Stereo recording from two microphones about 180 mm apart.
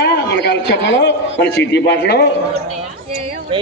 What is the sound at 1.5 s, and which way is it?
Speech, 65° left (ahead or behind).